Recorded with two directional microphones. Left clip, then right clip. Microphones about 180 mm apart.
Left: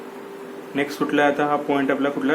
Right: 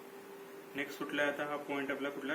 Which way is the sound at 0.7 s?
50° left (ahead or behind).